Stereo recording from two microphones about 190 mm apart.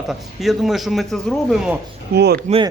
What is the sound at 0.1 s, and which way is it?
Speech, centre (ahead or behind).